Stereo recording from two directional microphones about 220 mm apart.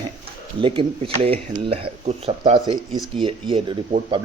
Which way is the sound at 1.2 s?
25° right (ahead or behind).